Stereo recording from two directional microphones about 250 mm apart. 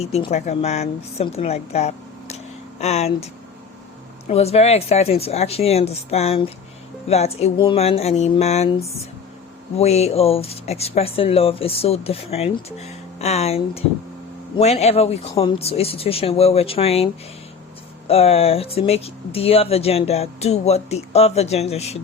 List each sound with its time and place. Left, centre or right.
0.0 s a woman's voice: left
4.3 s speech: left
18.1 s speech: left